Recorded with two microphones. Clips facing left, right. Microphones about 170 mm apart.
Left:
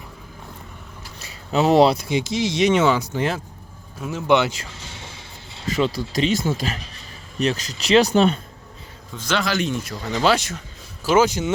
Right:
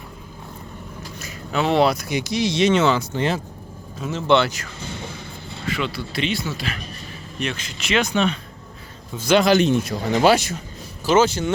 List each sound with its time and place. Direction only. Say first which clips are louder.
1.5 s speech: left 3 dB; 35° left (ahead or behind); by 3.1 s 10° left (ahead or behind)
3.2 s speech: right 1 dB; centre (ahead or behind); by 4.7 s 25° left (ahead or behind)
5.7 s speech: left 6 dB; 40° left (ahead or behind)
9.1 s a man's voice: right 7 dB; 15° right (ahead or behind)
10.1 s speech: right 3 dB; 10° right (ahead or behind)
11.0 s speech: even; 10° left (ahead or behind)